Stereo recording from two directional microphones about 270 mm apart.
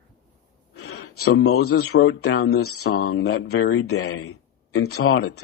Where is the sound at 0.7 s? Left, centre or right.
Left.